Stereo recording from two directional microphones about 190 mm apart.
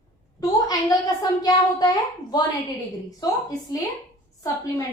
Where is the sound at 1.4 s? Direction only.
20° left (ahead or behind).